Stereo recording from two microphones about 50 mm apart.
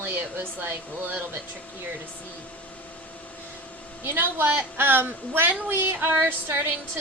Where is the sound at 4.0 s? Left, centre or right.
Right.